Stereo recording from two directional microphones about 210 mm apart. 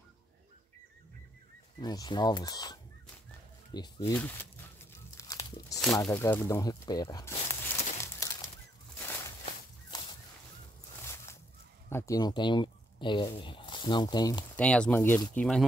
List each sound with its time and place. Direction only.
1.8 s speech: 20° left (ahead or behind)
4.1 s speech: 10° left (ahead or behind)
5.1 s a sound: 15° left (ahead or behind)
5.9 s speech: 10° left (ahead or behind)
8.0 s bird: 15° left (ahead or behind)
8.9 s a sound: 10° left (ahead or behind)
9.5 s walk: 20° left (ahead or behind)
11.0 s a sound: 10° left (ahead or behind)
11.9 s speech: 15° left (ahead or behind)
14.6 s speech: 5° left (ahead or behind)